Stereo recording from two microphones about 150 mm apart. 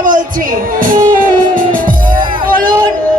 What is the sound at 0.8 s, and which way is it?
Music, 65° right (ahead or behind).